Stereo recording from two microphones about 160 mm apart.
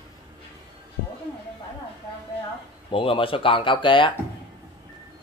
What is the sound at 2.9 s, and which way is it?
Speech, 35° left (ahead or behind).